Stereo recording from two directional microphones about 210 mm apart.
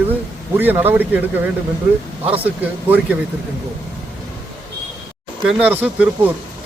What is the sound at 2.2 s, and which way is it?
Speech, 25° right (ahead or behind).